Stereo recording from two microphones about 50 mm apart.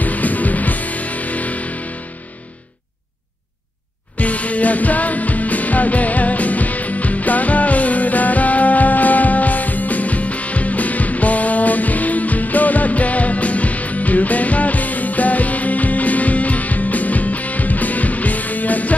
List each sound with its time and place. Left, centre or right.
0.0 s music: left
4.2 s music: left